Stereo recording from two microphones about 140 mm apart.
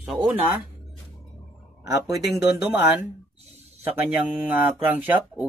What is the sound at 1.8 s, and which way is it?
Speech, 25° right (ahead or behind).